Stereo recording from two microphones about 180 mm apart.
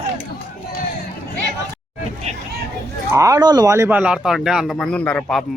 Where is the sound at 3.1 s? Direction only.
20° right (ahead or behind).